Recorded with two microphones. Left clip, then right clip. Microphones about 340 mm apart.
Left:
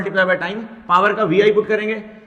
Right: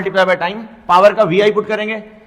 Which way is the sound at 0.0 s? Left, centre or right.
Right.